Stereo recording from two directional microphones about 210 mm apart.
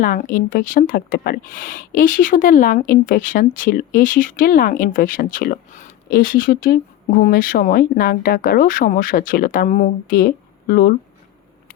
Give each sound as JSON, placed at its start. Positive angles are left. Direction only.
{"t": 0.0, "sound": "speech", "side_deg": 40}